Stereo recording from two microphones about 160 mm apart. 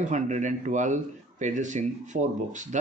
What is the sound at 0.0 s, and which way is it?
Speech, 50° right (ahead or behind).